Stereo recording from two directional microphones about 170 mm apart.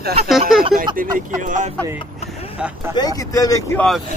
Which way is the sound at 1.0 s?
50° right (ahead or behind).